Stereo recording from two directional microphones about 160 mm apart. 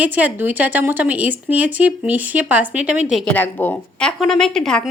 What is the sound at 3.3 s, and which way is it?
A woman's voice, 10° left (ahead or behind).